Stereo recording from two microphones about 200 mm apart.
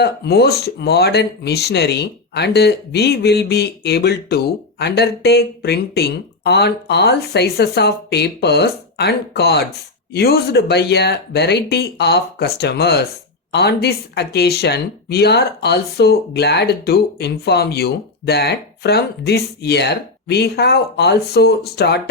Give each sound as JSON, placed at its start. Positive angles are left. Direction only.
{"t": 0.0, "sound": "speech", "side_deg": 55}